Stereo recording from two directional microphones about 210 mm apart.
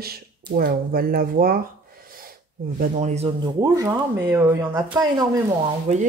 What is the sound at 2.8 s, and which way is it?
Speech, 35° right (ahead or behind).